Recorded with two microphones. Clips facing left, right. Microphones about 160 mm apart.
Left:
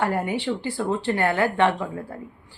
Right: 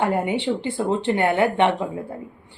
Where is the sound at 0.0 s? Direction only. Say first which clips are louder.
Right 3 dB; 20° right (ahead or behind).